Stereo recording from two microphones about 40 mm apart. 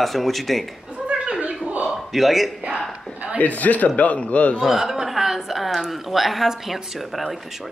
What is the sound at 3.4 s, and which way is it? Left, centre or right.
Speech, left.